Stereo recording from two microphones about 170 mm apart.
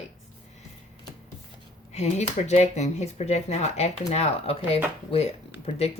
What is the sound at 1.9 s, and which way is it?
Speech, 40° left (ahead or behind).